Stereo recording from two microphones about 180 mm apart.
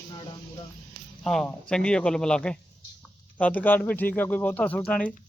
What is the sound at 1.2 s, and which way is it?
A man's voice, 5° left (ahead or behind).